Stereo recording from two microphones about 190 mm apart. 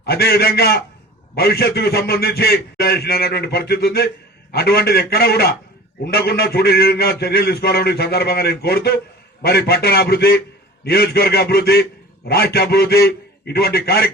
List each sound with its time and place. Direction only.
0.0 s a man's voice: 55° left (ahead or behind)